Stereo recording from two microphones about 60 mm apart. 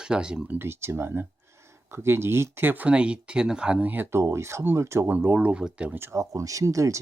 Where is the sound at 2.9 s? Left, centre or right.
Centre.